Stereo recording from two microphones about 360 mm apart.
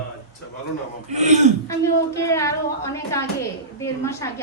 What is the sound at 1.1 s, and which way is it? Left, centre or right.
Speech, centre.